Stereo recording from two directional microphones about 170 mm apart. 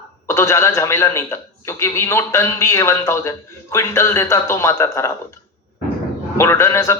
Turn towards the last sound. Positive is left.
turn(degrees=15)  # may be behind; listen again after turning